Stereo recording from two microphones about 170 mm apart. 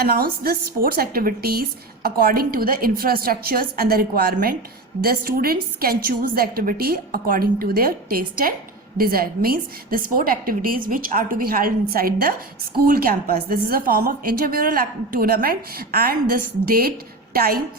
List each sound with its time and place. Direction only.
0.0 s a woman's voice: 60° right (ahead or behind)